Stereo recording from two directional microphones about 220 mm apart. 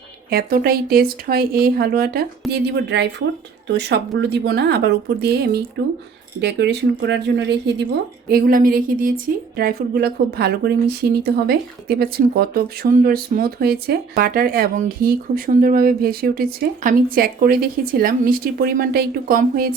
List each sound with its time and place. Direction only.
0.3 s a woman's voice: 45° right (ahead or behind)
8.3 s a woman's voice: 40° right (ahead or behind)